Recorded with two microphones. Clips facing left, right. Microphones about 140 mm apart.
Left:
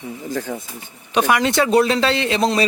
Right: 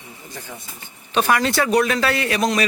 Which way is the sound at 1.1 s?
15° left (ahead or behind).